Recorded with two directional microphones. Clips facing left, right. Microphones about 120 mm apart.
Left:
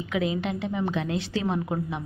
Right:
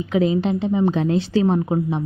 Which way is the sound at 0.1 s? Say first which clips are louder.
Right 8 dB; 35° right (ahead or behind).